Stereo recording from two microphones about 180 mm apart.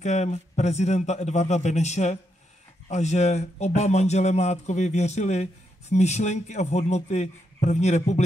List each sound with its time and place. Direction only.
0.0 s a man's voice: 40° left (ahead or behind)